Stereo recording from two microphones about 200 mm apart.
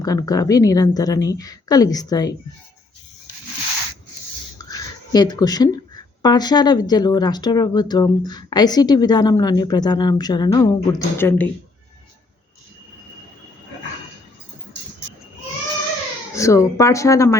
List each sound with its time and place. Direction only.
0.0 s speech: 20° left (ahead or behind)
4.5 s a sound: 20° left (ahead or behind)
6.2 s speech: 20° left (ahead or behind)
16.3 s speech: 15° left (ahead or behind)